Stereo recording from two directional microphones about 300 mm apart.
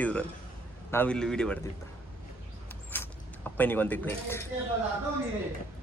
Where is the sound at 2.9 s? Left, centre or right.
Centre.